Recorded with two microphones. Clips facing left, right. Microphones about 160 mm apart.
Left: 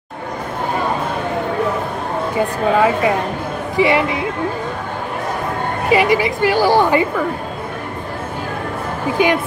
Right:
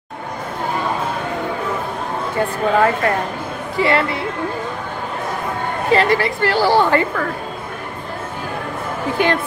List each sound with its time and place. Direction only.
2.3 s speech: 10° left (ahead or behind)
5.9 s speech: 10° left (ahead or behind)